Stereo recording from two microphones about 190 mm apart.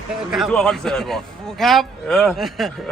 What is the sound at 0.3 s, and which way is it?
A man's voice, centre (ahead or behind).